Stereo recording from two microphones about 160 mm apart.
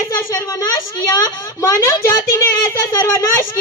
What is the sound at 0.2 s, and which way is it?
A woman's voice, 20° left (ahead or behind).